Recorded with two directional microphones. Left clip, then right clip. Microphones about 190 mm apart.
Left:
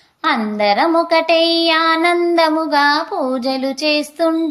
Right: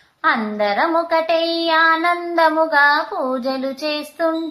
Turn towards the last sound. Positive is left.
turn(degrees=40)  # may be behind; listen again after turning